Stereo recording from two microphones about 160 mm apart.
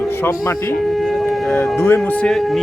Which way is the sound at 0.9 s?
Centre (ahead or behind).